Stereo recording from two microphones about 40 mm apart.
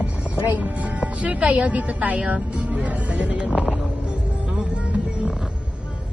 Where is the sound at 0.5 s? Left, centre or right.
Right.